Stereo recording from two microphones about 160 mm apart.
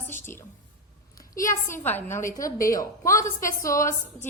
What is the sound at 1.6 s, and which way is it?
A woman's voice, 15° left (ahead or behind).